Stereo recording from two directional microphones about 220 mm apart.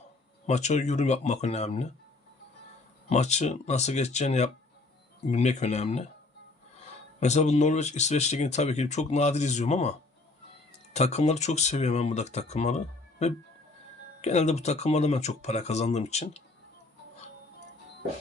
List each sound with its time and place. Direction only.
0.4 s speech: 30° left (ahead or behind)
3.1 s speech: 30° left (ahead or behind)
7.2 s speech: 30° left (ahead or behind)
10.9 s speech: 30° left (ahead or behind)